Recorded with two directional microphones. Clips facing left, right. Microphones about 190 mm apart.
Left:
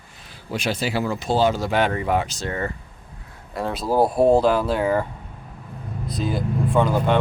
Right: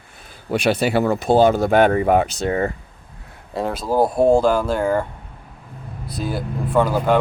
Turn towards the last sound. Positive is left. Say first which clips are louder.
# right 2 dB
turn(degrees=-5)  # may be behind; listen again after turning